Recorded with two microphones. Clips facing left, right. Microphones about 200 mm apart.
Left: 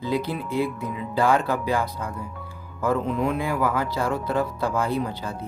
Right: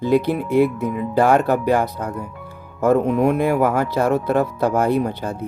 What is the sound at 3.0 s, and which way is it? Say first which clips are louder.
Speech: right 7 dB; 70° right (ahead or behind).